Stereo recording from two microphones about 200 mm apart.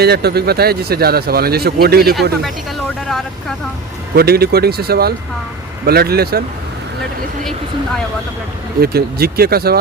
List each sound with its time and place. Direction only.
0.0 s speech: 55° right (ahead or behind)
4.1 s speech: 50° right (ahead or behind)
8.8 s speech: 50° right (ahead or behind)